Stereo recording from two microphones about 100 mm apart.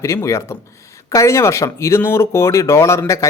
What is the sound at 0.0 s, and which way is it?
A man's voice, 30° left (ahead or behind).